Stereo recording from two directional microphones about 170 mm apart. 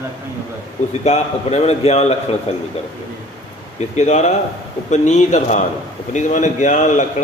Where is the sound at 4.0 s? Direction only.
40° left (ahead or behind).